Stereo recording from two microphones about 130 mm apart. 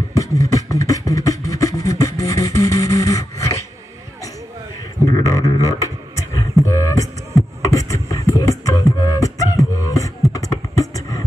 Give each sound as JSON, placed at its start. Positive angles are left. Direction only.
{"t": 0.1, "sound": "beatboxing", "side_deg": 25}
{"t": 5.0, "sound": "a sound", "side_deg": 25}
{"t": 6.3, "sound": "beatboxing", "side_deg": 25}